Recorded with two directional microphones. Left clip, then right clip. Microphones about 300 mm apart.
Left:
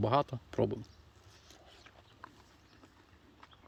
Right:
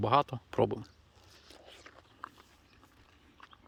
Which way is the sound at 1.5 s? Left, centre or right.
Centre.